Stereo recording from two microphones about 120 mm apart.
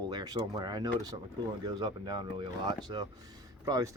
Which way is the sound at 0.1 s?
35° right (ahead or behind).